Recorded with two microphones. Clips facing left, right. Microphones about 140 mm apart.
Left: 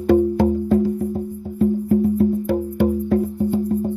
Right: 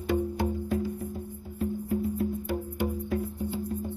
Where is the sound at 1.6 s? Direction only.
50° left (ahead or behind).